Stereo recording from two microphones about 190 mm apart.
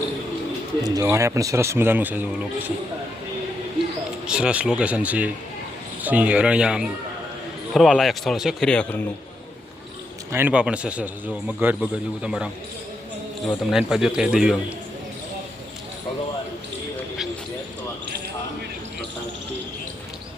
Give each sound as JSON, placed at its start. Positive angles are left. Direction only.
{"t": 0.9, "sound": "a man's voice", "side_deg": -15}
{"t": 4.3, "sound": "a man's voice", "side_deg": -5}
{"t": 10.3, "sound": "a man's voice", "side_deg": -10}
{"t": 13.7, "sound": "a man's voice", "side_deg": 0}